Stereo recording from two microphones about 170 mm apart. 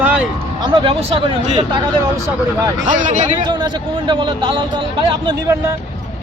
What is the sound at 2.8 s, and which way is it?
Speech, 50° right (ahead or behind).